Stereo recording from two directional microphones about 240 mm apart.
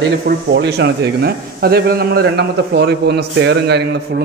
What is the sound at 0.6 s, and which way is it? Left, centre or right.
A man's voice, right.